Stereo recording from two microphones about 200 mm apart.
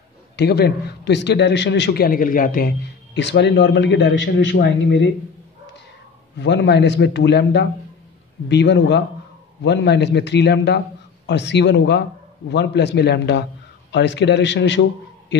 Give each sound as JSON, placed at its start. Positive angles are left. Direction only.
{"t": 0.4, "sound": "a man's voice", "side_deg": 55}
{"t": 3.2, "sound": "a man's voice", "side_deg": 60}
{"t": 6.4, "sound": "a man's voice", "side_deg": 60}